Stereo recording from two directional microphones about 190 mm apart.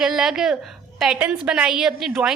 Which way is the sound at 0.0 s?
5° right (ahead or behind).